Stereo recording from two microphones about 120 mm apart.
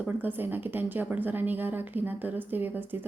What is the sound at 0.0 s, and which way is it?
Speech, 15° right (ahead or behind).